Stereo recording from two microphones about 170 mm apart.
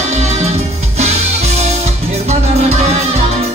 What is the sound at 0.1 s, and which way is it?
Music, 40° right (ahead or behind).